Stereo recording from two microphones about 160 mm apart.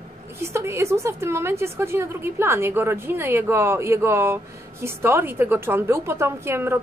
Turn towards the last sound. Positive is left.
turn(degrees=-15)  # may be behind; listen again after turning